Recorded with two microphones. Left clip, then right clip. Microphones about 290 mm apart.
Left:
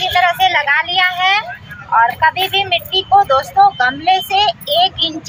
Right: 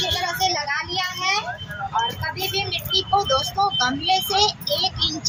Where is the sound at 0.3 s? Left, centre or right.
Centre.